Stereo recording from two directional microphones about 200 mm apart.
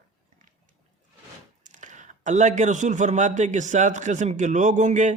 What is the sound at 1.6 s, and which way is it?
Speech, 40° right (ahead or behind).